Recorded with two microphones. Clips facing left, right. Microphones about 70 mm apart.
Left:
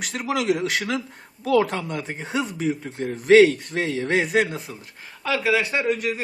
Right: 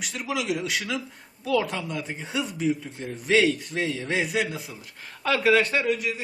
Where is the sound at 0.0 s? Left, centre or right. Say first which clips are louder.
Left 5 dB; left.